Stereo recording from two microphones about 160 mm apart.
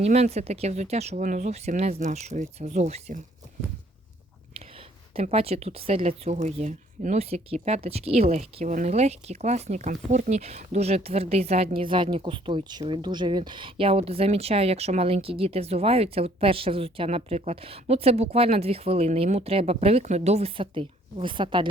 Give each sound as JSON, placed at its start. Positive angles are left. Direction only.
{"t": 0.0, "sound": "speech", "side_deg": -40}
{"t": 5.1, "sound": "speech", "side_deg": -40}